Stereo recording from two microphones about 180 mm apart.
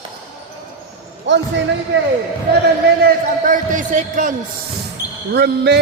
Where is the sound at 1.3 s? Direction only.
85° right.